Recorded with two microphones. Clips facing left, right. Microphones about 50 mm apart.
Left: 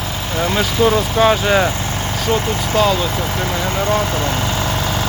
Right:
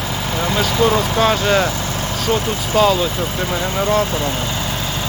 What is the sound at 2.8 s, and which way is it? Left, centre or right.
Speech, centre.